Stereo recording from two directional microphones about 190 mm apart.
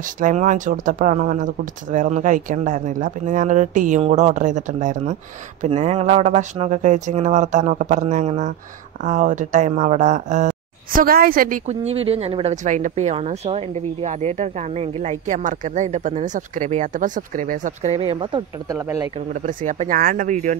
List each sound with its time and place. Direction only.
0.0 s speech: 40° right (ahead or behind)
18.2 s speech: 25° right (ahead or behind)
19.4 s speech: 40° right (ahead or behind)